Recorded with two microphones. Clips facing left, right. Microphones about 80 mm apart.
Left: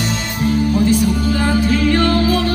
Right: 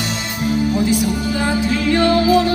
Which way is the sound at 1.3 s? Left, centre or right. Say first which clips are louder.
Left 2 dB; centre.